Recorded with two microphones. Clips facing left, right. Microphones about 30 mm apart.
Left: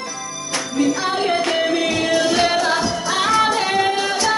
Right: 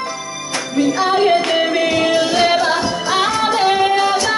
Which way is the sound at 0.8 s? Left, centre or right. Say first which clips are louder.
Right 5 dB; centre.